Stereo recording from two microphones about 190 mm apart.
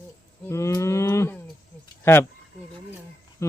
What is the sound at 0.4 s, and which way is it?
Cattle, 15° left (ahead or behind).